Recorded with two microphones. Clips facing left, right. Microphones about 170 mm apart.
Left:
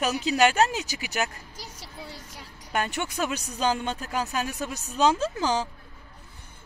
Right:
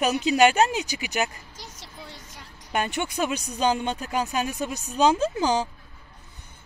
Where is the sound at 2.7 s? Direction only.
10° right (ahead or behind).